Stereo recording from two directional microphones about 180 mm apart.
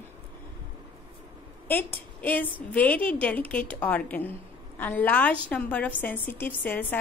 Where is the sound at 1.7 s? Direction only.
10° left (ahead or behind).